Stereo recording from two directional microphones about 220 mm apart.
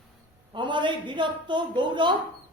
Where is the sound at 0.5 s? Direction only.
20° right (ahead or behind).